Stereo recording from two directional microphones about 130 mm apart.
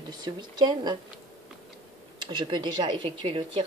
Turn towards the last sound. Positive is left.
turn(degrees=-45)  # may be behind; listen again after turning